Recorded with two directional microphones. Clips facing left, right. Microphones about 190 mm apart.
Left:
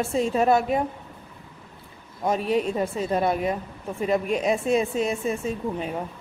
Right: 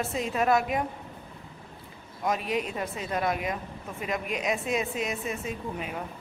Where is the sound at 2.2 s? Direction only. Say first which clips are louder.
Left 5 dB; 30° left (ahead or behind).